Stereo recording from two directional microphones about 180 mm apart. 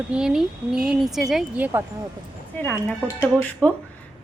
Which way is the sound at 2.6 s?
10° left (ahead or behind).